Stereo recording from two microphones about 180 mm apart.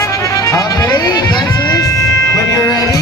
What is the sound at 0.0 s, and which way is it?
Music, 20° left (ahead or behind).